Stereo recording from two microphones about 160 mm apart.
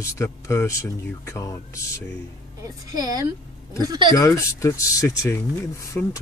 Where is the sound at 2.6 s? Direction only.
25° right (ahead or behind).